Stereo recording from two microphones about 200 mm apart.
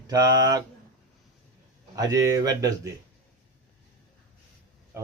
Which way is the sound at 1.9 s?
20° right (ahead or behind).